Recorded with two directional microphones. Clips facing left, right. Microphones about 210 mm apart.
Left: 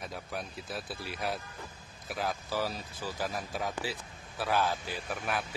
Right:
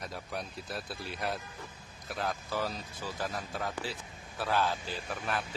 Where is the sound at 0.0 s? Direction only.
Centre (ahead or behind).